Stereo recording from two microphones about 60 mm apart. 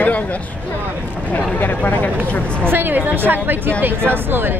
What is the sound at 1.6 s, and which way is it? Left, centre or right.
Speech, left.